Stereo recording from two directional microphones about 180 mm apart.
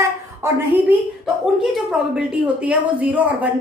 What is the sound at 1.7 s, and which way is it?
A woman's voice, 5° right (ahead or behind).